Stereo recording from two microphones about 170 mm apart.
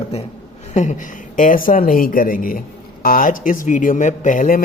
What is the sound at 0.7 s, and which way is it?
Speech, 45° left (ahead or behind).